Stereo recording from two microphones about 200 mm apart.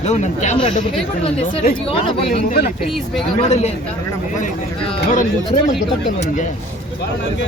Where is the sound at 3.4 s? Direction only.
30° left (ahead or behind).